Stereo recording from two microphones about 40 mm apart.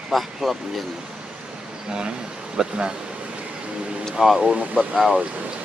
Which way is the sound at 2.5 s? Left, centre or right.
Centre.